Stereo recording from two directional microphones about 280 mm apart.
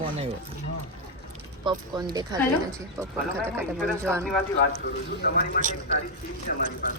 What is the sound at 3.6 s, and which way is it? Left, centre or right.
Speech, centre.